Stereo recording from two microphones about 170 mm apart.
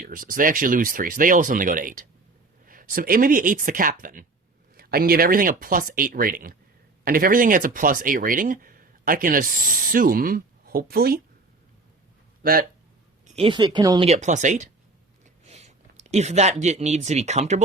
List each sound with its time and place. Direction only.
0.0 s speech: 55° right (ahead or behind)
12.4 s speech: 60° right (ahead or behind)
13.2 s speech: 35° right (ahead or behind)
14.1 s speech: 45° right (ahead or behind)